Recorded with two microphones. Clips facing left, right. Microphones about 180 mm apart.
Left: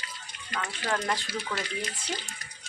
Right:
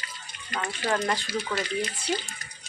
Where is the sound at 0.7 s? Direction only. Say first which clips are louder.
Right 4 dB; 5° right (ahead or behind).